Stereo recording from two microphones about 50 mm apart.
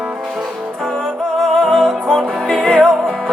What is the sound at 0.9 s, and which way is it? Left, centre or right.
Music, centre.